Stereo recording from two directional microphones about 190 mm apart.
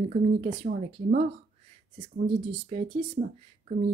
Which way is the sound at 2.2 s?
30° right (ahead or behind).